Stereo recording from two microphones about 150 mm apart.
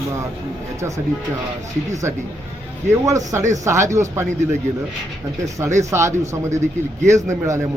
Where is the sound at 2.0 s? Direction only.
20° right (ahead or behind).